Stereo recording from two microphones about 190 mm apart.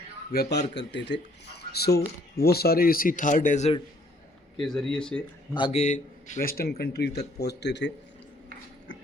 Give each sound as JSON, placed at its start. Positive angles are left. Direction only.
{"t": 0.3, "sound": "speech", "side_deg": 50}
{"t": 0.7, "sound": "speech", "side_deg": 65}
{"t": 4.6, "sound": "speech", "side_deg": 0}
{"t": 5.5, "sound": "speech", "side_deg": 30}